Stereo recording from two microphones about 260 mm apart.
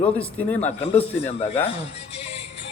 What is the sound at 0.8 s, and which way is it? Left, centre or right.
Speech, left.